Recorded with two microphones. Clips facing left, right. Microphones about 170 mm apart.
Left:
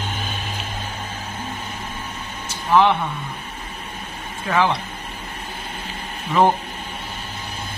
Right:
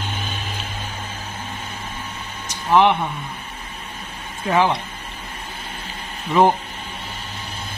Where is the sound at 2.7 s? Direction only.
15° right (ahead or behind).